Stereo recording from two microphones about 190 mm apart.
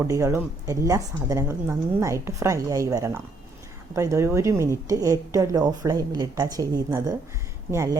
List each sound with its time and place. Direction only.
0.1 s speech: 15° right (ahead or behind)